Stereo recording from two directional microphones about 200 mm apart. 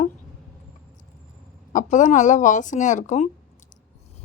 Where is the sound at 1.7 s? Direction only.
40° left (ahead or behind).